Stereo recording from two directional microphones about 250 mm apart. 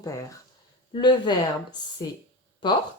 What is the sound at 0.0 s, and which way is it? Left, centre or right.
Speech, centre.